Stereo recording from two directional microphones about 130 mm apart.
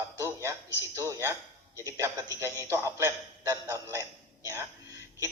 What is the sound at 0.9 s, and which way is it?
A man's voice, 20° right (ahead or behind).